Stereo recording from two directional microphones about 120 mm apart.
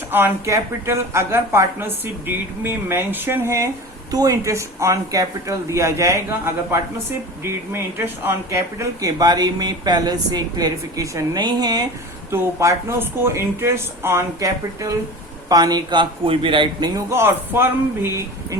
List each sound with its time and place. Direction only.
0.1 s speech: 15° right (ahead or behind); by 11.9 s 35° right (ahead or behind)
12.3 s speech: 20° right (ahead or behind); by 16.9 s 45° right (ahead or behind)
17.1 s speech: 20° right (ahead or behind)